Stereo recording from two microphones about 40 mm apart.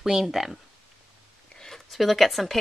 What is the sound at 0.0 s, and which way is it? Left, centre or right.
Speech, centre.